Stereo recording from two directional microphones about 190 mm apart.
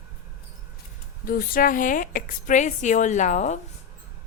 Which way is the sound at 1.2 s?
50° left (ahead or behind).